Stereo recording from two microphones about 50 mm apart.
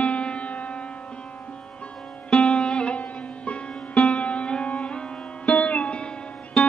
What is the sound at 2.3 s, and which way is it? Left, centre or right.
Music, left.